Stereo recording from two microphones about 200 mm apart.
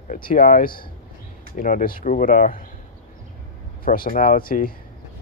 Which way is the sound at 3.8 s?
45° left (ahead or behind).